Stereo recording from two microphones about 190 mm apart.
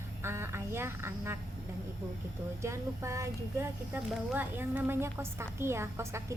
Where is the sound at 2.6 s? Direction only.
15° right (ahead or behind).